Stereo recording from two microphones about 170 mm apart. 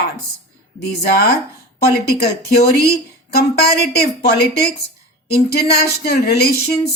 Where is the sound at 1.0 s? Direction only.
70° left (ahead or behind).